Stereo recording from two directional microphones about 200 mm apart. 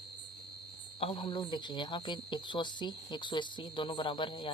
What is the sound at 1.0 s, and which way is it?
Speech, 25° left (ahead or behind).